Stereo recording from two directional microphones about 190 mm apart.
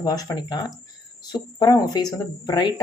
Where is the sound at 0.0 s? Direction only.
20° left (ahead or behind).